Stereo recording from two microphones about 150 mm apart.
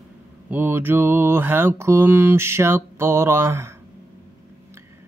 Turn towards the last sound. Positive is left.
turn(degrees=-15)  # may be behind; listen again after turning